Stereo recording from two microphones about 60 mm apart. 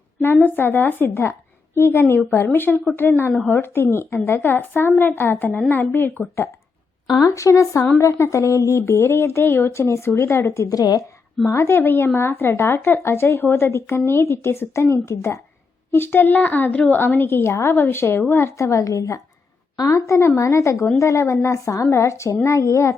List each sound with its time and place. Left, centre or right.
0.4 s a woman's voice: left
7.3 s speech: left
10.7 s a woman's voice: left
11.4 s speech: left
11.8 s a woman's voice: left
17.7 s a woman's voice: left
18.5 s speech: left
19.9 s speech: left